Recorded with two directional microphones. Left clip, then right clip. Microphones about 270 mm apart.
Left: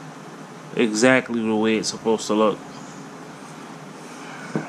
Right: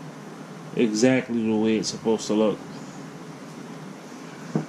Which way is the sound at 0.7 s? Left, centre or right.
Centre.